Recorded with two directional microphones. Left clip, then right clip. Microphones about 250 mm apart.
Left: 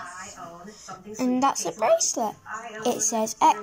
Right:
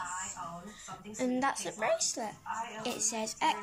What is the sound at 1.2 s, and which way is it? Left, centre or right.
Speech, centre.